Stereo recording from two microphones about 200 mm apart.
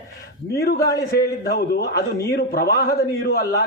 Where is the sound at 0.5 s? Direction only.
50° left (ahead or behind).